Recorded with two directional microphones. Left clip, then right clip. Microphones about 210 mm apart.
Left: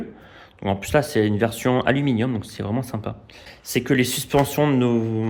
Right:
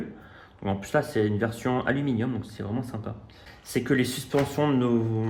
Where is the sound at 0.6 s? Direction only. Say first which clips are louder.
Left 6 dB; 40° left (ahead or behind).